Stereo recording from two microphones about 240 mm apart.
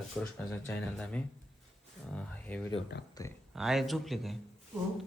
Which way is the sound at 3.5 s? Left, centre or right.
Centre.